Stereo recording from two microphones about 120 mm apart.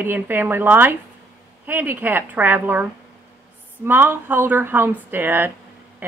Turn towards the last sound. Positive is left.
turn(degrees=-15)  # may be behind; listen again after turning